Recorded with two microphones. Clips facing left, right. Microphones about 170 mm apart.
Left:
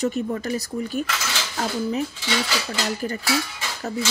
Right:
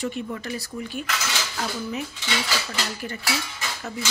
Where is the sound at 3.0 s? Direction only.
35° left (ahead or behind).